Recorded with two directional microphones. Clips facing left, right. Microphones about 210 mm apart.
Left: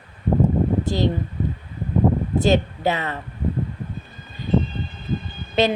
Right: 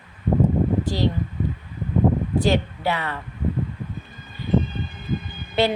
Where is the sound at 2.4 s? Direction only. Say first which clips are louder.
Left 4 dB; 20° left (ahead or behind).